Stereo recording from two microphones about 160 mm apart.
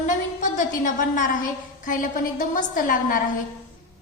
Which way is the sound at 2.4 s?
55° left (ahead or behind).